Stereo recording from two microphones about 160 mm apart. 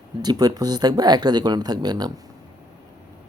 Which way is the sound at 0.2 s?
25° right (ahead or behind).